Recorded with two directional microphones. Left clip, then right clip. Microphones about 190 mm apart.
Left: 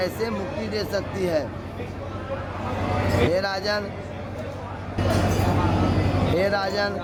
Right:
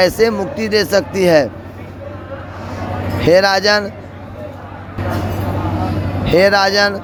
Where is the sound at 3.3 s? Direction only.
45° right (ahead or behind).